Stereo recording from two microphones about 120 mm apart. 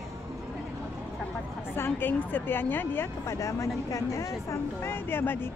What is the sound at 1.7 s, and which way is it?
A woman's voice, 15° left (ahead or behind).